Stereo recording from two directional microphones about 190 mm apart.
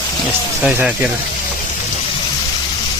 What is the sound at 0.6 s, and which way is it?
Speech, 5° right (ahead or behind).